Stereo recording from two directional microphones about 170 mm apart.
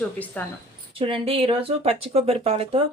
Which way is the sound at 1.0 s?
35° right (ahead or behind).